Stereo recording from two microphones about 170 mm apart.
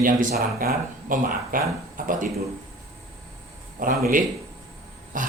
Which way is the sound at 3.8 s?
55° right (ahead or behind).